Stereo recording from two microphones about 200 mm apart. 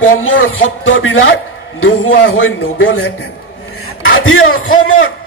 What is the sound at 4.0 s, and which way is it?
A man's voice, 90° left.